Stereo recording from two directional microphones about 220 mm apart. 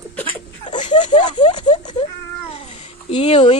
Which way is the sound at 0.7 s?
20° left (ahead or behind).